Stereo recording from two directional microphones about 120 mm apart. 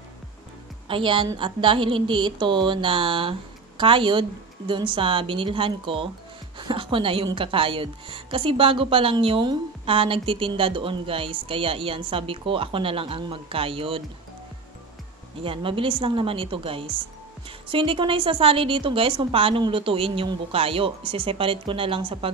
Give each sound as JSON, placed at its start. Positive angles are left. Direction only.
{"t": 0.8, "sound": "a woman's voice", "side_deg": -45}
{"t": 15.4, "sound": "a woman's voice", "side_deg": -50}